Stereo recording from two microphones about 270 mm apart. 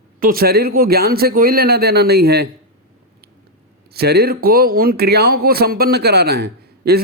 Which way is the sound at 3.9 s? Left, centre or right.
Right.